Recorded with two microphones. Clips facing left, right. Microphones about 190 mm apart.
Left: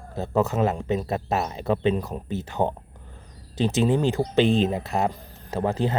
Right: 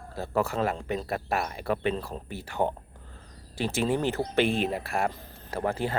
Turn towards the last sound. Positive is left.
turn(degrees=20)  # may be behind; listen again after turning